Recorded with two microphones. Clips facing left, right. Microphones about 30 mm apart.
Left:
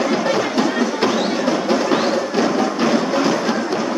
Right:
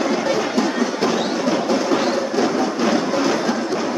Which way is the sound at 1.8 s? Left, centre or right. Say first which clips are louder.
Left 1 dB; left.